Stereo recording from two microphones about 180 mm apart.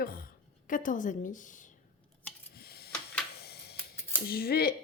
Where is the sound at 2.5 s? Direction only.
60° left (ahead or behind).